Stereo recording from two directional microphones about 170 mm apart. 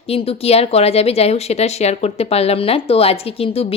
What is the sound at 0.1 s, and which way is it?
Speech, 35° left (ahead or behind).